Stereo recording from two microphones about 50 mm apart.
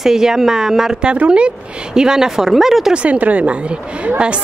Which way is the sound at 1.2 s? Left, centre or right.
Right.